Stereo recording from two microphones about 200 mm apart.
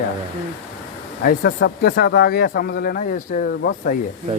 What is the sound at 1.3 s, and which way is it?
Speech, 45° left (ahead or behind).